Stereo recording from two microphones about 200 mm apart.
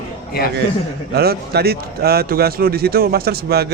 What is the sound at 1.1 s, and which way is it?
Speech, 50° right (ahead or behind).